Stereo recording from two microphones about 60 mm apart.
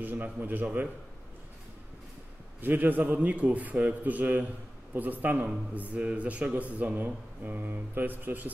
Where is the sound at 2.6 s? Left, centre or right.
Right.